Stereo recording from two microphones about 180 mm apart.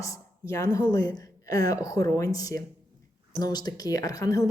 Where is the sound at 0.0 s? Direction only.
15° left (ahead or behind).